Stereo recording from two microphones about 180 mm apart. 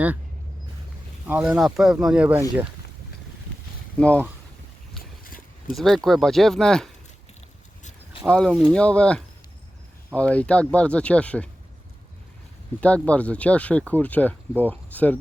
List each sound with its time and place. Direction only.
1.5 s speech: 5° right (ahead or behind)
3.9 s speech: 5° left (ahead or behind)
5.2 s a sound: 50° left (ahead or behind)
5.7 s speech: centre (ahead or behind)
8.2 s speech: 5° left (ahead or behind)
12.8 s speech: 5° left (ahead or behind)